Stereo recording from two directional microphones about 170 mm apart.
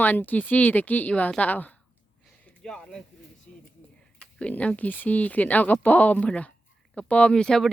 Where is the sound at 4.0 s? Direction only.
5° left (ahead or behind).